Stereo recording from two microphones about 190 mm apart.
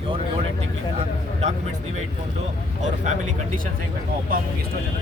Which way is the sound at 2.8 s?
35° right (ahead or behind).